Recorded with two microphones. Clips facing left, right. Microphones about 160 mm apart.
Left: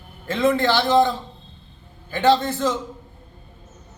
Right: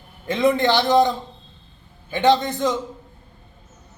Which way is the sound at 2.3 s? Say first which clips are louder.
Even; 15° right (ahead or behind).